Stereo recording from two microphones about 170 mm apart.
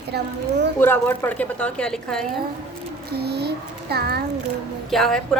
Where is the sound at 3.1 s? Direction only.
75° right (ahead or behind).